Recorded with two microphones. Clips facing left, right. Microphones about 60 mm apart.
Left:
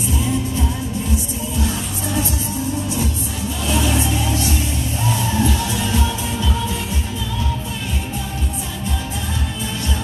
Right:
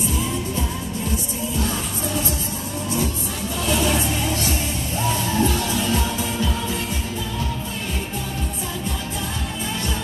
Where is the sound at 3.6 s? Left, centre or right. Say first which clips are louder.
Left 1 dB; right.